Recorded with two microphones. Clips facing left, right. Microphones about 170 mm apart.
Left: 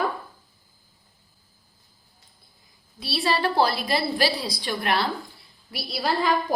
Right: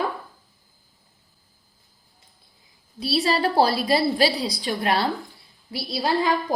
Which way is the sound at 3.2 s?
30° right (ahead or behind).